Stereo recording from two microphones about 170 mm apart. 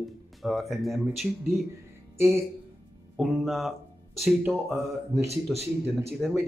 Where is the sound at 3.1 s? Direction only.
Centre (ahead or behind).